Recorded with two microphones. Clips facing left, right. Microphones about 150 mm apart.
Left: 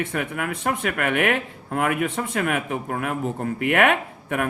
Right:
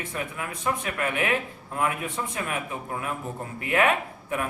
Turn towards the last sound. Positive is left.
turn(degrees=65)  # may be behind; listen again after turning